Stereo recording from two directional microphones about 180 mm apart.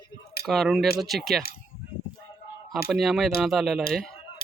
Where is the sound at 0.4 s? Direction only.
Centre (ahead or behind).